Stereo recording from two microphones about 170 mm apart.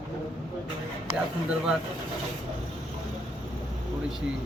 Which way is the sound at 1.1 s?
40° left (ahead or behind).